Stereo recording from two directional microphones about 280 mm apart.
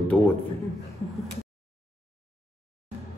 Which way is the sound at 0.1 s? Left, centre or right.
Centre.